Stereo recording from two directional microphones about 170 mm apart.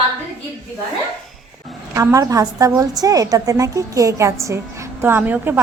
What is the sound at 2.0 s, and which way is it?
A woman's voice, 20° right (ahead or behind).